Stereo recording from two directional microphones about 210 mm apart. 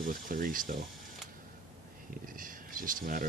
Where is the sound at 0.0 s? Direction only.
40° right (ahead or behind).